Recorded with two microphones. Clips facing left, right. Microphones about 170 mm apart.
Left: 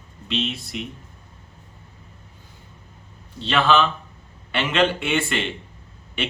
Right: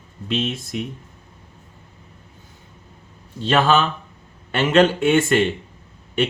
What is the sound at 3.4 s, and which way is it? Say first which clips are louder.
A man's voice: right 2 dB; 45° right (ahead or behind).